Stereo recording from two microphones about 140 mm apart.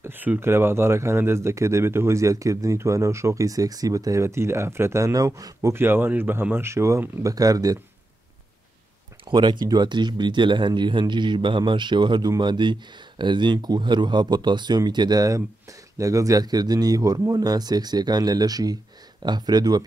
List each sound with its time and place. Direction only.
0.0 s speech: 15° right (ahead or behind)
9.3 s speech: 30° right (ahead or behind)